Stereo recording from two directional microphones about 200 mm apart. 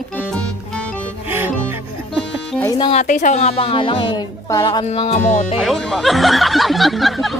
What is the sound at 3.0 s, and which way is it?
A woman's voice, 40° left (ahead or behind).